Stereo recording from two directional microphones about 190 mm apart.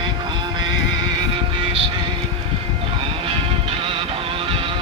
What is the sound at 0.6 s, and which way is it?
Vehicle, 20° right (ahead or behind).